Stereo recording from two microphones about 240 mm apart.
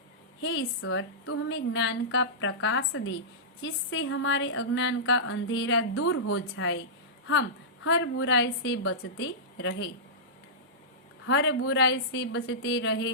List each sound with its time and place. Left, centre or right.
0.4 s a woman's voice: left
7.9 s a woman's voice: left
11.3 s a woman's voice: left